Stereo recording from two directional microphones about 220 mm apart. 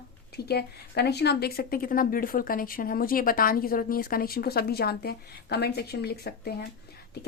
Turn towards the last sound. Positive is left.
turn(degrees=45)  # may be behind; listen again after turning